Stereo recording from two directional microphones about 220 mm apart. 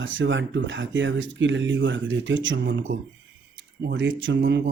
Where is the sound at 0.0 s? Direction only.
60° right (ahead or behind).